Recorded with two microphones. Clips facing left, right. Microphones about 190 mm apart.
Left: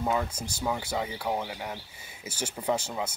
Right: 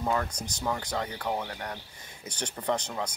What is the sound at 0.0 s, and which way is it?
Speech, 5° left (ahead or behind).